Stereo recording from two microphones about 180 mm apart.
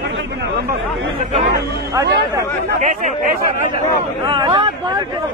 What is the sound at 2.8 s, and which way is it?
Speech, 45° right (ahead or behind).